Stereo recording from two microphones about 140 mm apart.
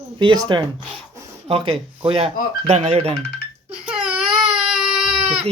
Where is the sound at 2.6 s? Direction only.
50° right (ahead or behind).